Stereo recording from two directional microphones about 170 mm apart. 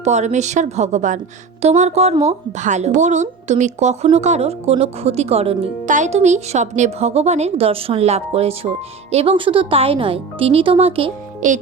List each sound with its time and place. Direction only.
0.0 s a woman's voice: 40° right (ahead or behind)
11.4 s a woman's voice: 50° right (ahead or behind)